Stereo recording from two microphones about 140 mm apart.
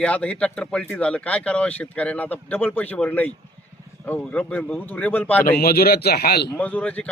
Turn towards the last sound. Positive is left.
turn(degrees=10)  # may be behind; listen again after turning